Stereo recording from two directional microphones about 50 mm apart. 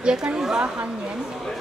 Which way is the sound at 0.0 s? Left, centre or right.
Centre.